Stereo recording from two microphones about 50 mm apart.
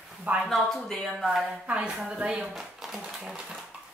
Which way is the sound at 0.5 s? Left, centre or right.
Centre.